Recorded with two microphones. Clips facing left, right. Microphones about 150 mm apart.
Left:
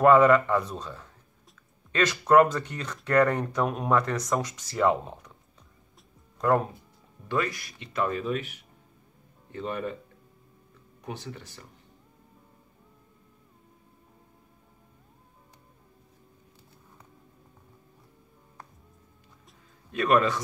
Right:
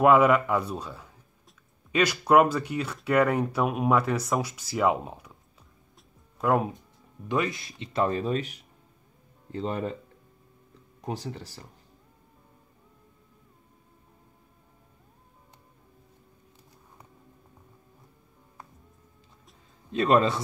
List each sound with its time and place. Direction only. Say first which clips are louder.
0.0 s speech: left 1 dB; 10° right (ahead or behind)
6.3 s speech: even; 10° right (ahead or behind)
7.2 s speech: right 1 dB; 20° right (ahead or behind); by 8.5 s 35° right (ahead or behind)
9.6 s speech: right 2 dB; 30° right (ahead or behind)
11.0 s speech: right 4 dB; 35° right (ahead or behind)
19.9 s speech: right 1 dB; 25° right (ahead or behind)